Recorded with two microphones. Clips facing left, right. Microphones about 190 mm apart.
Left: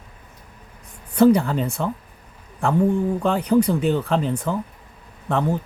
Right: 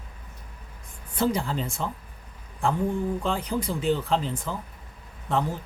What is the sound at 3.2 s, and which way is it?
Speech, 65° left (ahead or behind).